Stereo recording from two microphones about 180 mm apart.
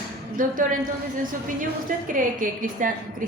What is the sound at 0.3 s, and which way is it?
Speech, 50° right (ahead or behind).